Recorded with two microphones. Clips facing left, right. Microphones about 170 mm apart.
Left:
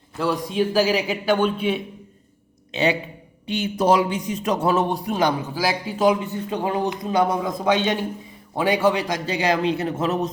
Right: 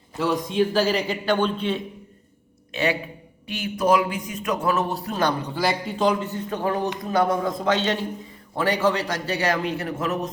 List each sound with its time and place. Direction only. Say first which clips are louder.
0.2 s a man's voice: even; centre (ahead or behind)
2.7 s a man's voice: left 3 dB; 20° left (ahead or behind)
4.7 s a man's voice: left 3 dB; 20° left (ahead or behind)